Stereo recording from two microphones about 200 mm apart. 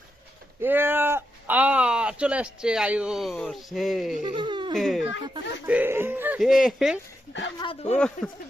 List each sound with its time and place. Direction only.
0.6 s speech: 10° right (ahead or behind)
4.3 s speech: 25° right (ahead or behind)
4.8 s speech: centre (ahead or behind)
7.6 s speech: 30° left (ahead or behind)
7.9 s speech: 5° left (ahead or behind)